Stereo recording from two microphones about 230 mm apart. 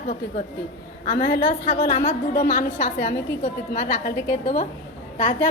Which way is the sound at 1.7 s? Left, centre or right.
Left.